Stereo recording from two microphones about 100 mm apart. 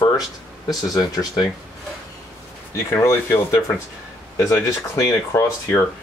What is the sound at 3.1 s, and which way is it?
Speech, 30° left (ahead or behind).